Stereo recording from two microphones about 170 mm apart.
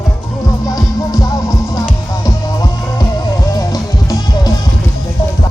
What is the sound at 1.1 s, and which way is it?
Music, 20° left (ahead or behind).